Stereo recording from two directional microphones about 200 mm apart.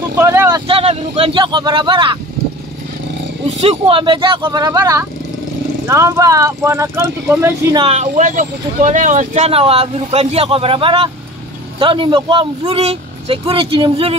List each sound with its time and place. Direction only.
0.1 s vehicle: 15° right (ahead or behind)
0.7 s a man's voice: 30° right (ahead or behind)
3.6 s a man's voice: 30° right (ahead or behind); by 7.8 s 10° right (ahead or behind)
7.8 s a man's voice: 35° right (ahead or behind)